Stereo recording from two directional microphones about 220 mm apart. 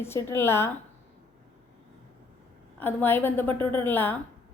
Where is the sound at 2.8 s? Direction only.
10° left (ahead or behind).